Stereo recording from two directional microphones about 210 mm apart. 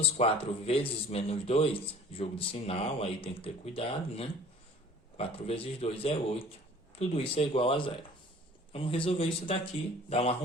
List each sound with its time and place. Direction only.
0.0 s speech: 25° left (ahead or behind)